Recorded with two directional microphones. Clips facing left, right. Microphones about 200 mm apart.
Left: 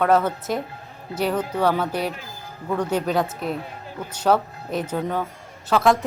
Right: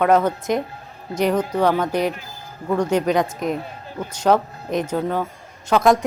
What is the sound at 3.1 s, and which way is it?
A woman's voice, 5° left (ahead or behind).